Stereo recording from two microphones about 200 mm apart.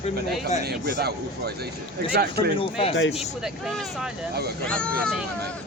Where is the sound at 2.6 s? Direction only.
25° left (ahead or behind).